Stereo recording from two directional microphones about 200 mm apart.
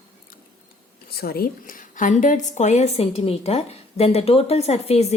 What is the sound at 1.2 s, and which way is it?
A woman's voice, 50° left (ahead or behind).